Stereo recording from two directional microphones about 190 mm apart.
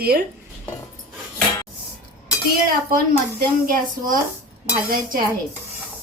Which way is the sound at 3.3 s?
50° right (ahead or behind).